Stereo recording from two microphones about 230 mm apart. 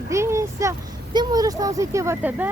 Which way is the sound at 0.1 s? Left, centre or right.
Centre.